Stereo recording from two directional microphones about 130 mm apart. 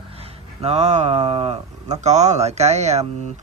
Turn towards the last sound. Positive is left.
turn(degrees=-60)  # may be behind; listen again after turning